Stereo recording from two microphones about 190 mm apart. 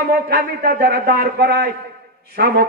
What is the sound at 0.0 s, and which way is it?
A man's voice, 55° right (ahead or behind).